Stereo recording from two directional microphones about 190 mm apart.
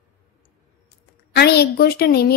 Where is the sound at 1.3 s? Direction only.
60° left (ahead or behind).